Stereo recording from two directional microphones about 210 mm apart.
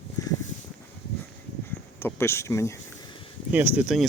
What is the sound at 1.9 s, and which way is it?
Speech, 10° left (ahead or behind).